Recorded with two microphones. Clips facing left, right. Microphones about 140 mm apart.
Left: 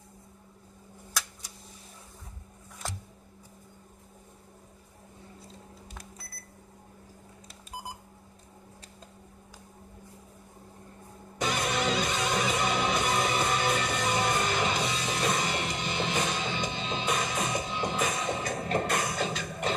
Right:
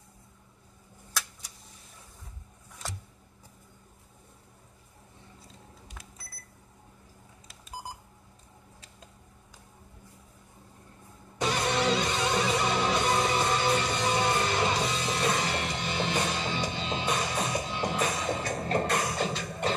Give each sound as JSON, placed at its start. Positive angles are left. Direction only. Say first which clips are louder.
{"t": 11.4, "sound": "music", "louder": "right 2 dB", "side_deg": -30}